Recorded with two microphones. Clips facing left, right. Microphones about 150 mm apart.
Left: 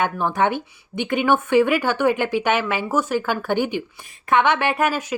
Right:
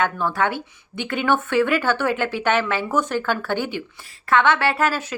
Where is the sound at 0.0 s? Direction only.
20° left (ahead or behind).